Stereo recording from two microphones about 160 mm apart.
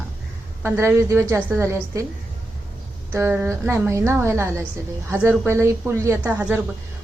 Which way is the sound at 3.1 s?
15° right (ahead or behind).